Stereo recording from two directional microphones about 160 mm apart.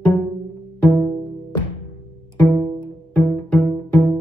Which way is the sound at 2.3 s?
10° left (ahead or behind).